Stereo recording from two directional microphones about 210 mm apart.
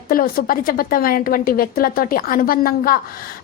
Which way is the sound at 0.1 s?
45° left (ahead or behind).